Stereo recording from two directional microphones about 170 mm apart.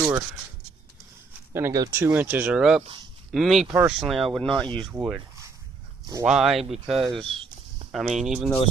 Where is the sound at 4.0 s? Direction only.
Centre (ahead or behind).